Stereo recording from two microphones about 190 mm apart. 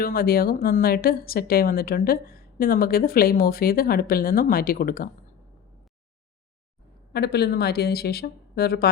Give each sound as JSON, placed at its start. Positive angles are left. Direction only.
{"t": 0.0, "sound": "speech", "side_deg": 50}
{"t": 7.1, "sound": "a woman's voice", "side_deg": 60}